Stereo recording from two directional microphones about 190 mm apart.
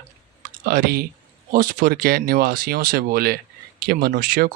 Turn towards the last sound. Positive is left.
turn(degrees=-50)  # may be behind; listen again after turning